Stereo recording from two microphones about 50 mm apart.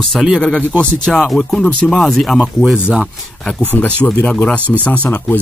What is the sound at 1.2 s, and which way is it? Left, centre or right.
Speech, centre.